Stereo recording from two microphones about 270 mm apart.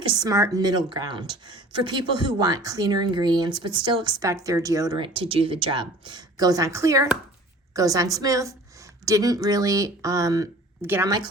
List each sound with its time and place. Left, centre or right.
0.0 s speech: centre